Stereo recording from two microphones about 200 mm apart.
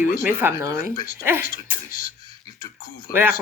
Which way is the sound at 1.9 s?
45° left (ahead or behind).